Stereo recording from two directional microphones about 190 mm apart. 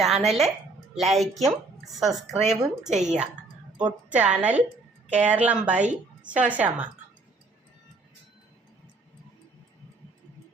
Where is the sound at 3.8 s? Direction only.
5° right (ahead or behind).